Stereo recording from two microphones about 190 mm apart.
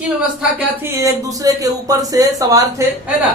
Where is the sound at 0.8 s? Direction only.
15° right (ahead or behind).